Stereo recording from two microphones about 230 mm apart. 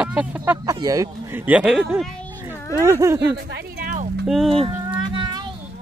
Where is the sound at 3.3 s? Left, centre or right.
Right.